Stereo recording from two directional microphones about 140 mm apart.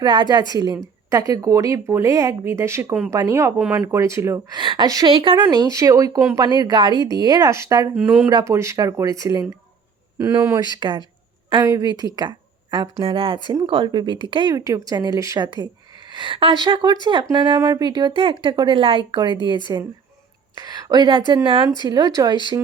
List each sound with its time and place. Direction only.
0.0 s speech: 30° right (ahead or behind)
4.5 s speech: 35° right (ahead or behind)
10.8 s a woman's voice: 35° right (ahead or behind)
12.7 s speech: 40° right (ahead or behind)
14.5 s speech: 25° right (ahead or behind)
20.6 s a woman's voice: 30° right (ahead or behind)